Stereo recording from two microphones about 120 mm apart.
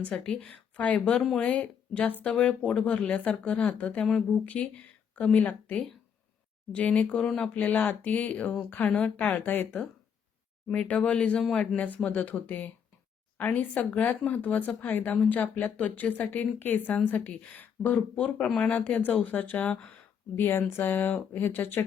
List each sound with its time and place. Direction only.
0.0 s speech: 10° left (ahead or behind)